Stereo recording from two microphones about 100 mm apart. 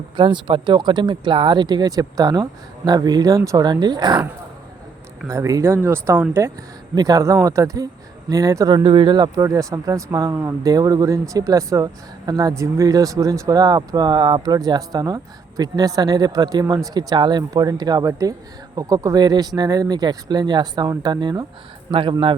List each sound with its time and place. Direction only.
0.2 s speech: 55° right (ahead or behind)
5.3 s speech: 30° right (ahead or behind)
6.9 s speech: 40° right (ahead or behind)
8.7 s speech: 50° right (ahead or behind)
9.4 s speech: 35° right (ahead or behind)